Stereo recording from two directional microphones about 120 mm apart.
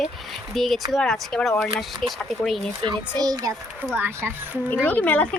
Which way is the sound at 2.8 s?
35° right (ahead or behind).